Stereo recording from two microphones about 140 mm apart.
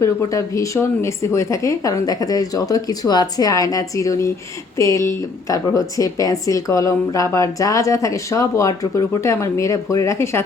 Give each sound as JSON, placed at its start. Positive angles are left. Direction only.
{"t": 0.0, "sound": "speech", "side_deg": 25}